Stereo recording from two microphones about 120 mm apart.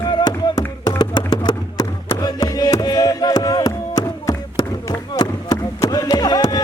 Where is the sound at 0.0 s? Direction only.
35° left (ahead or behind).